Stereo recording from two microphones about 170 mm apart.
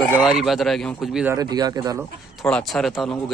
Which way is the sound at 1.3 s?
20° right (ahead or behind).